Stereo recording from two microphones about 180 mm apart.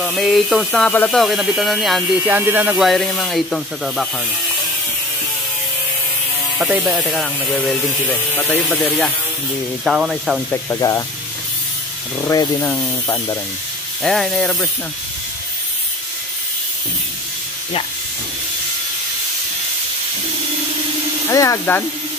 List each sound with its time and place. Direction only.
0.0 s speech: centre (ahead or behind)
2.2 s speech: 10° right (ahead or behind)
6.6 s speech: 5° right (ahead or behind)
9.8 s speech: 5° right (ahead or behind)
10.5 s speech: 15° left (ahead or behind)
12.3 s speech: 20° left (ahead or behind)
14.0 s speech: centre (ahead or behind)
21.3 s speech: 15° left (ahead or behind)